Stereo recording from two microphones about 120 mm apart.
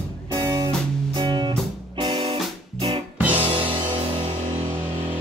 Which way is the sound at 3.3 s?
50° right (ahead or behind).